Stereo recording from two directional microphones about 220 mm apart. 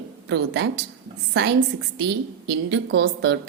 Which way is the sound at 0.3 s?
55° right (ahead or behind).